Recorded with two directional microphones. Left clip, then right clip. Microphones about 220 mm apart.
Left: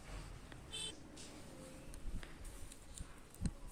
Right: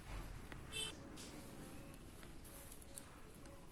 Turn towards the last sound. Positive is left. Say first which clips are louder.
# left 8 dB
turn(degrees=40)  # may be behind; listen again after turning